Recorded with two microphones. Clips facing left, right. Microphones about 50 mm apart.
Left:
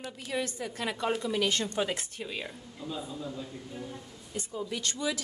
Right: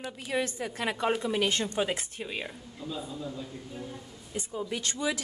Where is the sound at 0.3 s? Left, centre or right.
Right.